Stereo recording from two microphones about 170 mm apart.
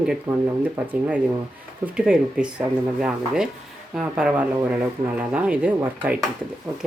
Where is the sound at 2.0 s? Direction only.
5° right (ahead or behind).